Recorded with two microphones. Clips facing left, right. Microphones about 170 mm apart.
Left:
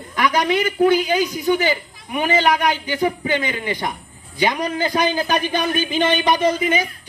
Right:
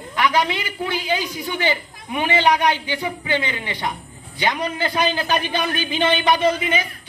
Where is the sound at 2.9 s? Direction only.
45° left (ahead or behind).